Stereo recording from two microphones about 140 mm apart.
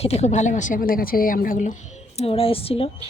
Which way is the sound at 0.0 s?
50° left (ahead or behind).